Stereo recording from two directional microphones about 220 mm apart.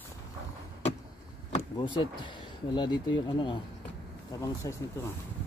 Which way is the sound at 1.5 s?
20° left (ahead or behind).